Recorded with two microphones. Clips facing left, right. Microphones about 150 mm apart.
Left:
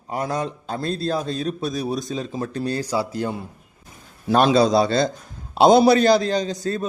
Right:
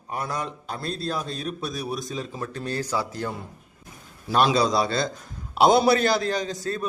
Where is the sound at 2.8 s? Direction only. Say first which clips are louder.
Left 4 dB; 10° left (ahead or behind).